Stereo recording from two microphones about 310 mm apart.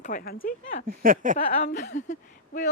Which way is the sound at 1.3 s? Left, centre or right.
Left.